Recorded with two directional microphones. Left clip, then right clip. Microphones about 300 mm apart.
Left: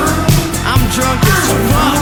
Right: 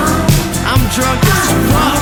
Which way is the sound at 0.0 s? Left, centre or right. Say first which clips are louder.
Even; centre.